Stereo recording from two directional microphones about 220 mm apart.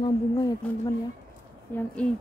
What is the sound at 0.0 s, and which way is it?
Speech, 20° left (ahead or behind).